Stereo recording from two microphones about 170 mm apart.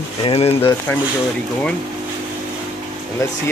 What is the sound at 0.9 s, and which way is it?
Speech, 10° left (ahead or behind).